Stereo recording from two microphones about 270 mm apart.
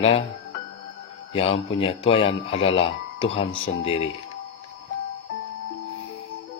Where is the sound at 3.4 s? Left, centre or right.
Left.